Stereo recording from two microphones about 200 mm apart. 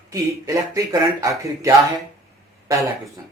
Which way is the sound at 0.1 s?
15° right (ahead or behind).